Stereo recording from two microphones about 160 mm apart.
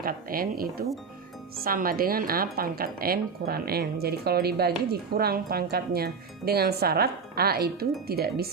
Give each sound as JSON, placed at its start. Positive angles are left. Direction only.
{"t": 0.0, "sound": "a woman's voice", "side_deg": -65}